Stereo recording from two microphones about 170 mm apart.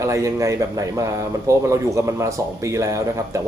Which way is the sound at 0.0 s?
20° right (ahead or behind).